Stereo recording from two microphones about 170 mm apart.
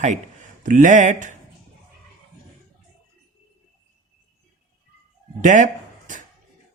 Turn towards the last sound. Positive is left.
turn(degrees=-50)  # may be behind; listen again after turning